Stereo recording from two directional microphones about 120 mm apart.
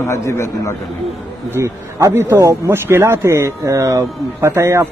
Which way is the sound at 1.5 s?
25° right (ahead or behind).